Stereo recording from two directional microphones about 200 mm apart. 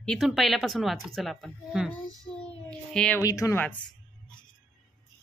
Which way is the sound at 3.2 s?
15° left (ahead or behind).